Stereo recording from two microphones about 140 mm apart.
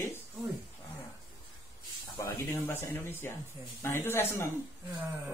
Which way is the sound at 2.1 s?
20° left (ahead or behind).